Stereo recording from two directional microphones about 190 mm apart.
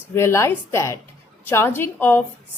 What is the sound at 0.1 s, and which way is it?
A woman's voice, 15° left (ahead or behind).